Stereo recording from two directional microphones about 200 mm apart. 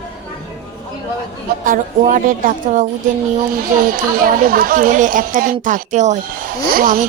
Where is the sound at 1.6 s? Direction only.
40° right (ahead or behind).